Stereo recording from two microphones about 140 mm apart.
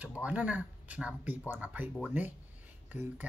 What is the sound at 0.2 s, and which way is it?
Speech, 10° right (ahead or behind).